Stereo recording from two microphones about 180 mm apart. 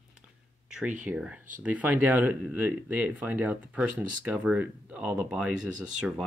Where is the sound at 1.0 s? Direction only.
5° right (ahead or behind).